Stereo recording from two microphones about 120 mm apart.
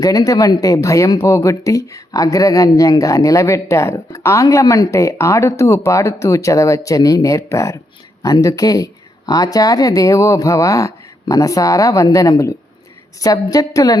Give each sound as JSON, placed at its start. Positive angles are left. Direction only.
{"t": 0.0, "sound": "speech", "side_deg": 30}